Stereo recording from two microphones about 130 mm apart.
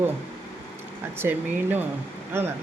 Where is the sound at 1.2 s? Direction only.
15° right (ahead or behind).